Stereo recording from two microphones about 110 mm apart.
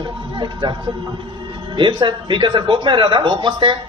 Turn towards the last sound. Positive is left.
turn(degrees=-45)  # may be behind; listen again after turning